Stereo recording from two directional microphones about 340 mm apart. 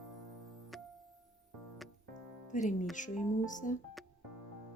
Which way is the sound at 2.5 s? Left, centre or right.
Left.